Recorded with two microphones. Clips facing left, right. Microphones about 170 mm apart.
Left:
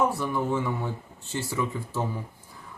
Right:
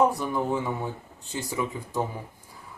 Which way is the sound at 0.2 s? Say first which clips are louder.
Even; 15° right (ahead or behind).